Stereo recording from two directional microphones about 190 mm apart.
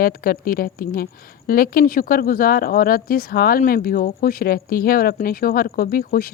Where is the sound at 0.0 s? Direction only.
50° left (ahead or behind).